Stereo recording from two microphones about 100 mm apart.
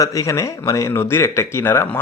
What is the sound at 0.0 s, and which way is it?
Speech, 35° left (ahead or behind).